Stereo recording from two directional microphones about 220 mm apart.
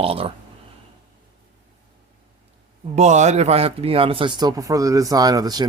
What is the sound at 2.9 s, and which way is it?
Speech, 30° right (ahead or behind).